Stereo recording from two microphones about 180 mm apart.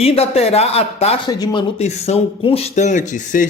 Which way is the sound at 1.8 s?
35° left (ahead or behind).